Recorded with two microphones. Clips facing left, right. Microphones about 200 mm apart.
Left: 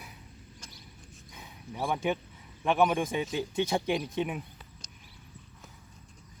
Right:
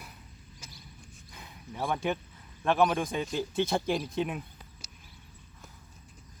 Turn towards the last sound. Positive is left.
turn(degrees=0)  # may be behind; listen again after turning